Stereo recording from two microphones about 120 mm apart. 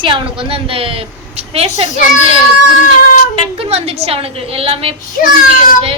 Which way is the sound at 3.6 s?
55° right (ahead or behind).